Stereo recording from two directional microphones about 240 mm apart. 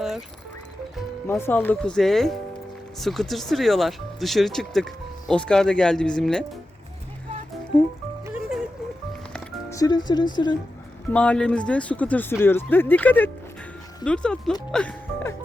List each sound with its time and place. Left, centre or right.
0.9 s speech: centre
9.3 s music: centre
11.1 s speech: centre
14.7 s music: centre